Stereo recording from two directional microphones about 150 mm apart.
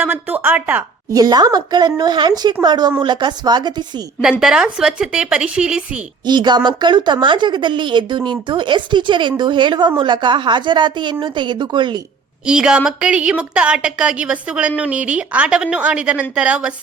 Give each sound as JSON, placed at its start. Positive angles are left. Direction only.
{"t": 0.0, "sound": "a woman's voice", "side_deg": -10}
{"t": 1.1, "sound": "speech", "side_deg": -25}
{"t": 4.2, "sound": "a woman's voice", "side_deg": -5}
{"t": 6.2, "sound": "speech", "side_deg": -30}
{"t": 12.5, "sound": "a woman's voice", "side_deg": -5}